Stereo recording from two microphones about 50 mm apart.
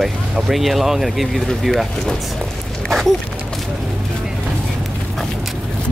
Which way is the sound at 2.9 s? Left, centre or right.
Centre.